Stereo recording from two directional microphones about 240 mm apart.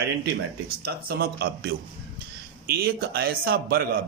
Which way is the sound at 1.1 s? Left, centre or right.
Right.